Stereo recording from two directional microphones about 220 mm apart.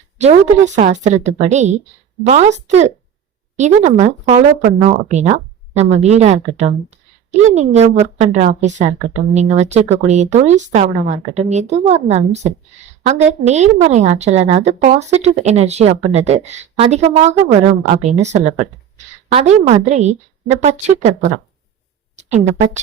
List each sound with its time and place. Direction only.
0.2 s a woman's voice: 30° right (ahead or behind)
22.1 s a woman's voice: 30° right (ahead or behind)